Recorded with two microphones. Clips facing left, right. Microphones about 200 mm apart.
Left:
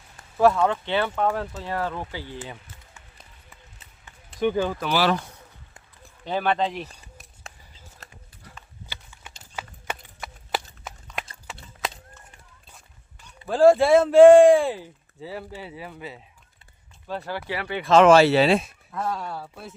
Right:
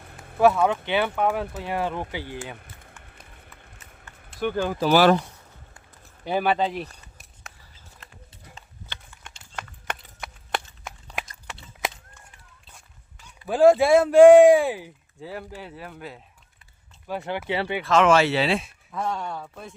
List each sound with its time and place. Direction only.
0.0 s a sound: 60° right (ahead or behind)
0.3 s speech: 5° right (ahead or behind)
3.0 s run: 60° right (ahead or behind)
4.4 s speech: centre (ahead or behind)
4.8 s speech: 45° right (ahead or behind)
6.2 s speech: 10° right (ahead or behind)
8.9 s a sound: 5° left (ahead or behind)
9.4 s horse: 5° left (ahead or behind)
10.8 s a sound: centre (ahead or behind)
13.5 s speech: 5° right (ahead or behind)
17.1 s speech: 15° right (ahead or behind)
17.8 s speech: 35° left (ahead or behind)
18.9 s speech: 5° left (ahead or behind)